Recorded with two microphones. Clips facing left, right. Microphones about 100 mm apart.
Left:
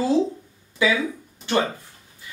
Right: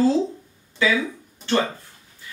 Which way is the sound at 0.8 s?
15° left (ahead or behind).